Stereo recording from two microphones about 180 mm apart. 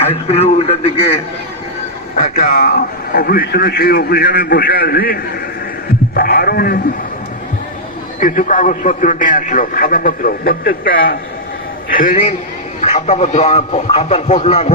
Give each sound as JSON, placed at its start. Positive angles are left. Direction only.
{"t": 0.1, "sound": "speech", "side_deg": 35}
{"t": 2.1, "sound": "a man's voice", "side_deg": 50}
{"t": 8.2, "sound": "a man's voice", "side_deg": 45}
{"t": 12.8, "sound": "speech", "side_deg": 35}